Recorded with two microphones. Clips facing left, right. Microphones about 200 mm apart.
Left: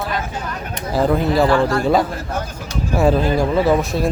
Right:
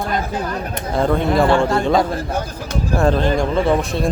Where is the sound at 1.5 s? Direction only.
30° right (ahead or behind).